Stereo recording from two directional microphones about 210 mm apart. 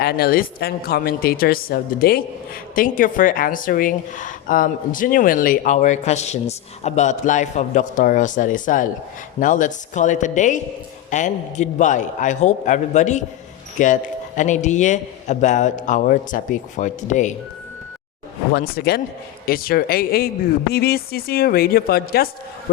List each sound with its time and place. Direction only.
0.0 s speech: 50° left (ahead or behind)
18.5 s speech: 50° left (ahead or behind)